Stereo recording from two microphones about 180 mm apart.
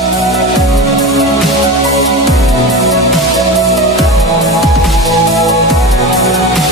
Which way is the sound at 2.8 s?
Centre (ahead or behind).